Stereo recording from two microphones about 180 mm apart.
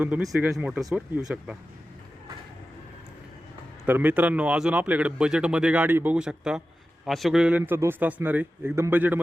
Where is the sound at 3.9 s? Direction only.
10° right (ahead or behind).